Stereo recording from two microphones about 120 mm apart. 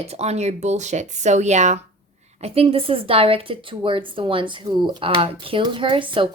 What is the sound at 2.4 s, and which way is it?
Speech, 60° right (ahead or behind).